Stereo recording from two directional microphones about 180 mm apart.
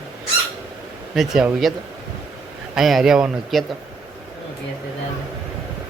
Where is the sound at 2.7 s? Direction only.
Centre (ahead or behind).